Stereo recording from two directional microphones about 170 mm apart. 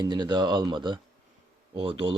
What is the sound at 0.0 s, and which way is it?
Speech, 25° right (ahead or behind).